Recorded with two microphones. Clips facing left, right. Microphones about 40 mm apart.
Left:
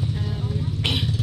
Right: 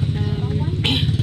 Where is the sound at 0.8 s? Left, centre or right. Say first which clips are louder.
Right 4 dB; right.